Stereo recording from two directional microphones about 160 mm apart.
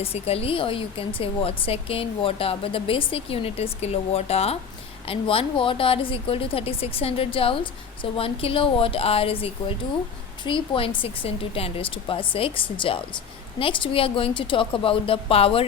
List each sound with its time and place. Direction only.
0.0 s a woman's voice: 40° left (ahead or behind)